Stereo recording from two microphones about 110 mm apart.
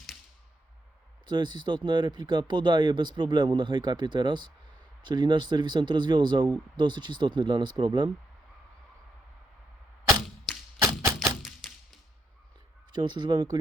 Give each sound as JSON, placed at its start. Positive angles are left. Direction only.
{"t": 1.2, "sound": "speech", "side_deg": -45}
{"t": 10.8, "sound": "a sound", "side_deg": -25}
{"t": 11.3, "sound": "tap", "side_deg": 0}
{"t": 12.9, "sound": "speech", "side_deg": -45}